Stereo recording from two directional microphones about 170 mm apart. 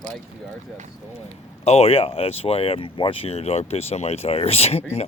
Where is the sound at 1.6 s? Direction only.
35° left (ahead or behind).